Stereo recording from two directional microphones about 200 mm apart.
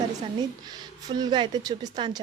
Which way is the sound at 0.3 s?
20° right (ahead or behind).